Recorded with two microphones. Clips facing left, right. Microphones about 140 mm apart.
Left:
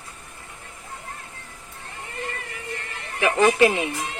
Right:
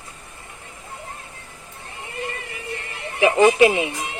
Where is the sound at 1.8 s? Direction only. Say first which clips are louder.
Right 2 dB; 20° right (ahead or behind).